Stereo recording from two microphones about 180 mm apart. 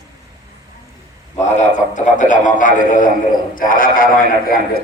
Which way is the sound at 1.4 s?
40° left (ahead or behind).